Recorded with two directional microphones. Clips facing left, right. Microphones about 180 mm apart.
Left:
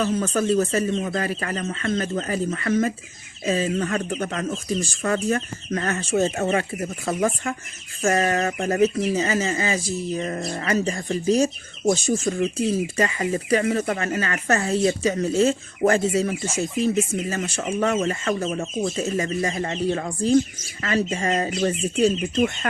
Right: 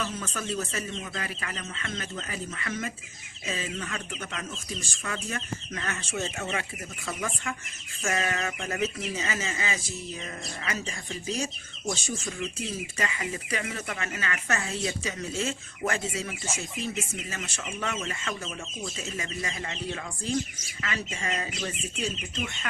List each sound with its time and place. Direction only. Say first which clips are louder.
0.0 s speech: left 12 dB; 40° left (ahead or behind)